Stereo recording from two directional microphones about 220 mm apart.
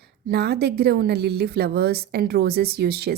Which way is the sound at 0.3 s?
45° right (ahead or behind).